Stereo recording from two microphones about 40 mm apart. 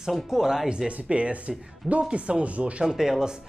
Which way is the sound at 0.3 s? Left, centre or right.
Centre.